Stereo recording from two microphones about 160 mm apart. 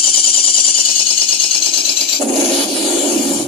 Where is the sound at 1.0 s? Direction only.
35° left (ahead or behind).